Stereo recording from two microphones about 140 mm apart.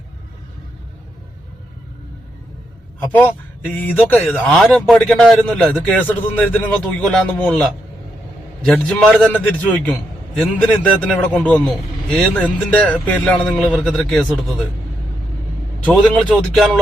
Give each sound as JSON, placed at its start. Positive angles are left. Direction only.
{"t": 3.8, "sound": "speech", "side_deg": 10}
{"t": 15.9, "sound": "speech", "side_deg": 0}